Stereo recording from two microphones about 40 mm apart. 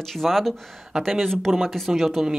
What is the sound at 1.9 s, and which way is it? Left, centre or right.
Speech, centre.